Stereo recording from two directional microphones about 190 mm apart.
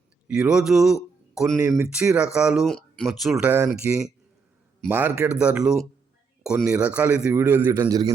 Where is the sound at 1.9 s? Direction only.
5° right (ahead or behind).